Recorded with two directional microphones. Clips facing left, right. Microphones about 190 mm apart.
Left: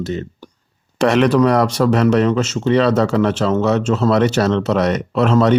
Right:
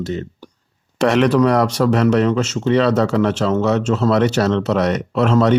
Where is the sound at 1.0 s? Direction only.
35° left (ahead or behind).